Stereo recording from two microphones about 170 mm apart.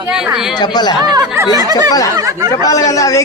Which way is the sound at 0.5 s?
25° left (ahead or behind).